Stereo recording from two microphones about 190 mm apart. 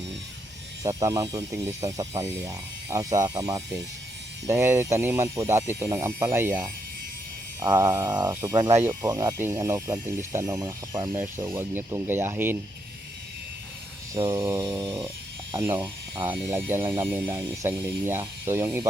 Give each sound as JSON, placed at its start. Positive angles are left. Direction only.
{"t": 0.8, "sound": "speech", "side_deg": -20}
{"t": 7.6, "sound": "a sound", "side_deg": -20}
{"t": 8.4, "sound": "speech", "side_deg": -15}
{"t": 11.1, "sound": "speech", "side_deg": -15}
{"t": 14.1, "sound": "a sound", "side_deg": -20}
{"t": 15.5, "sound": "speech", "side_deg": -15}